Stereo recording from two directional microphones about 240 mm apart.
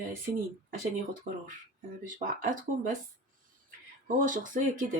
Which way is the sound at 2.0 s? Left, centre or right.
Right.